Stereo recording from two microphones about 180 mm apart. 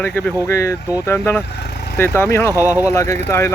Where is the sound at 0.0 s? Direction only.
10° left (ahead or behind).